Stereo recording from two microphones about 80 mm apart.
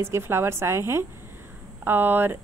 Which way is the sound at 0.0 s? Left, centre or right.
Right.